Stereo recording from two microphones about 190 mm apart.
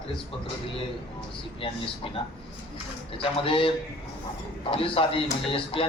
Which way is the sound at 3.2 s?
30° left (ahead or behind).